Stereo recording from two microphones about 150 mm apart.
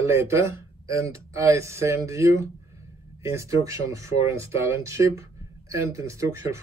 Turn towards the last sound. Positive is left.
turn(degrees=-20)  # may be behind; listen again after turning